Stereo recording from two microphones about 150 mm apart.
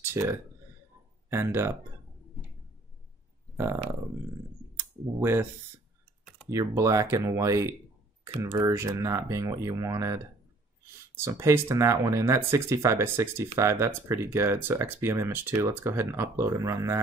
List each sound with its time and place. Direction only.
0.0 s speech: 15° right (ahead or behind)
5.2 s speech: 15° right (ahead or behind)
6.2 s computer keyboard: 5° left (ahead or behind)
6.5 s speech: 20° right (ahead or behind)